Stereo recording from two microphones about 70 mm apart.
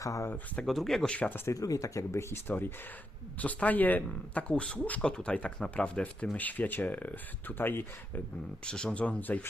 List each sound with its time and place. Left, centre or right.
0.0 s speech: left
0.6 s speech: centre
1.5 s speech: left
2.3 s speech: left
8.6 s speech: centre